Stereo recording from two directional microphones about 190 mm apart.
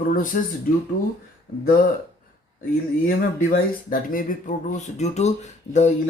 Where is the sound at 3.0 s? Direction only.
50° left (ahead or behind).